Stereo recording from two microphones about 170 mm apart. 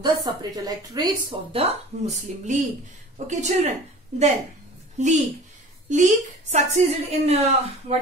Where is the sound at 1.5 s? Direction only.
40° right (ahead or behind).